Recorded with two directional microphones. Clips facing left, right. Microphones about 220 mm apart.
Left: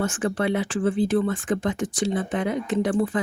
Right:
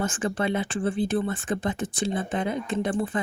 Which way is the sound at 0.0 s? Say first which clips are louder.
Left 2 dB; 70° left (ahead or behind).